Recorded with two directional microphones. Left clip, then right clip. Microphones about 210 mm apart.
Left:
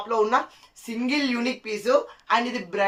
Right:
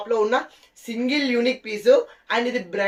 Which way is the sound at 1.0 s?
20° left (ahead or behind).